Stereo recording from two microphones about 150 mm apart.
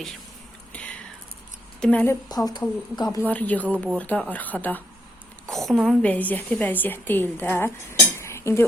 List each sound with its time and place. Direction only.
0.7 s a sound: 10° left (ahead or behind)
1.8 s speech: 10° left (ahead or behind)
2.3 s speech: 25° left (ahead or behind)
3.2 s a woman's voice: 10° left (ahead or behind)